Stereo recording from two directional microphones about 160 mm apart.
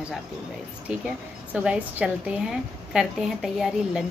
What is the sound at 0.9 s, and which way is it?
A woman's voice, 5° right (ahead or behind).